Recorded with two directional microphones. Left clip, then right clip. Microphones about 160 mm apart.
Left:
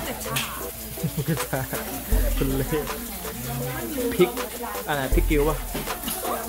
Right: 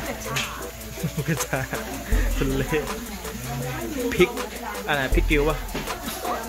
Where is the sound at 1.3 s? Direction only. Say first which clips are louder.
Right 2 dB; centre (ahead or behind).